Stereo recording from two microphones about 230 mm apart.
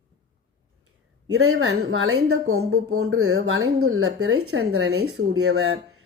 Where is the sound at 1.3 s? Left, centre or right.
Right.